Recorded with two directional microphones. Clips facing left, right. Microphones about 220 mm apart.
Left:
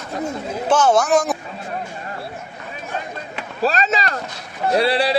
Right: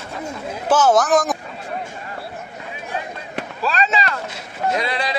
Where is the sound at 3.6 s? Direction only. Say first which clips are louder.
Left 2 dB; 40° left (ahead or behind).